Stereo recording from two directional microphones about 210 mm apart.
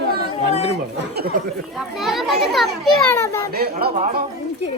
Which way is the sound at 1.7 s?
Centre (ahead or behind).